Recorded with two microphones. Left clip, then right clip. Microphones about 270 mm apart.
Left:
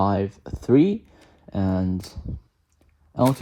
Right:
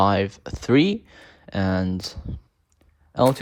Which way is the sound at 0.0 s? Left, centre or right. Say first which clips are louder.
Right 3 dB; left.